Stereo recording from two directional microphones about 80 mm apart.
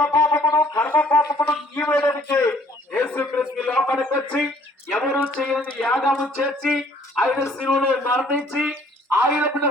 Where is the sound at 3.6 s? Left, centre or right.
Centre.